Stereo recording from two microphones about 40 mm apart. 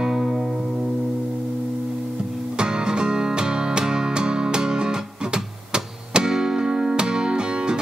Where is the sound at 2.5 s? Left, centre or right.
Right.